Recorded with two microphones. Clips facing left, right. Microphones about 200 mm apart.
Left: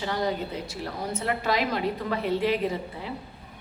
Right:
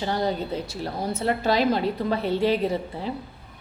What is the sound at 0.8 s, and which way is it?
A woman's voice, 30° right (ahead or behind).